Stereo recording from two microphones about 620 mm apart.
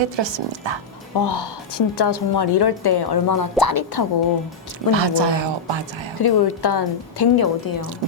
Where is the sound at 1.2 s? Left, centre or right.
Left.